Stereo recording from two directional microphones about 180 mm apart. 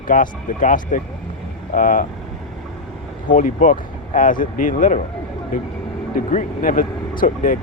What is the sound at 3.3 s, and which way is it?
Speech, 45° left (ahead or behind).